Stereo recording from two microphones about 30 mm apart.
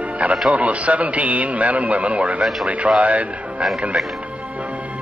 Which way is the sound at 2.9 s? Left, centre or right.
Right.